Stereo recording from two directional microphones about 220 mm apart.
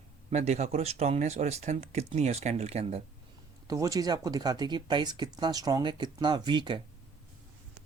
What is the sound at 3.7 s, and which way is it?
Speech, 15° right (ahead or behind).